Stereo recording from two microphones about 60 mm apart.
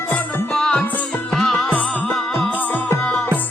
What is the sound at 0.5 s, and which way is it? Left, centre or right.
Music, centre.